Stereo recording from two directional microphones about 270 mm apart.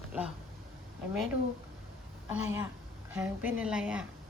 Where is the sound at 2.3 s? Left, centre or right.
Centre.